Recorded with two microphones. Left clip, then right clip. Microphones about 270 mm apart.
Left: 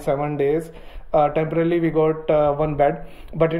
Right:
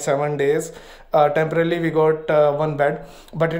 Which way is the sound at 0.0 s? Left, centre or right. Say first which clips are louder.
Right 2 dB; centre.